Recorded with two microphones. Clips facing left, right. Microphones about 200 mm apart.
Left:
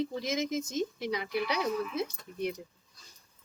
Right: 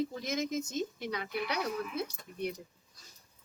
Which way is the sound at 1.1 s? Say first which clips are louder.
Left 3 dB; 10° left (ahead or behind).